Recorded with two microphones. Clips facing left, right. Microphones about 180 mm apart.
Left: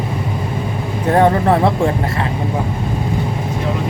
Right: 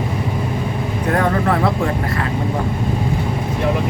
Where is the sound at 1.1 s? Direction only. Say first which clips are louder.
Left 5 dB; 25° left (ahead or behind).